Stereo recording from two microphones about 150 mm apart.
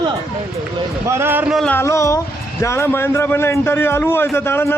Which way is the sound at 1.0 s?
15° right (ahead or behind).